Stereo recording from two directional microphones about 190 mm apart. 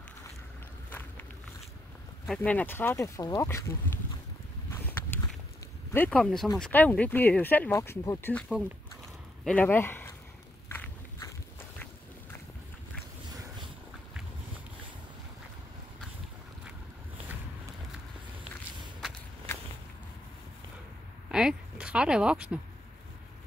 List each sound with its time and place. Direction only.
0.8 s vehicle: 10° left (ahead or behind)
2.2 s speech: 5° left (ahead or behind)
4.7 s a sound: 10° left (ahead or behind)
5.9 s speech: 5° left (ahead or behind)
10.7 s biting: 15° left (ahead or behind)
21.3 s a sound: 5° right (ahead or behind)